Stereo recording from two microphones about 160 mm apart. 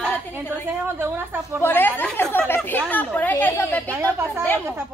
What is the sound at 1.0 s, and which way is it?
Speech, 15° right (ahead or behind).